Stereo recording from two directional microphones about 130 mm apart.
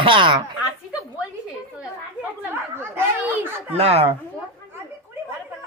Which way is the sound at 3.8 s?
50° right (ahead or behind).